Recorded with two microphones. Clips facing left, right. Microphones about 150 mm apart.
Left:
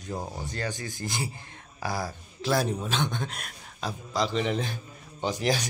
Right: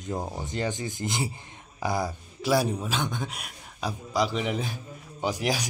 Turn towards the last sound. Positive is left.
turn(degrees=-10)  # may be behind; listen again after turning